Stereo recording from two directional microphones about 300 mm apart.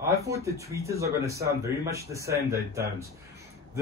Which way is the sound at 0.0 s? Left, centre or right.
Centre.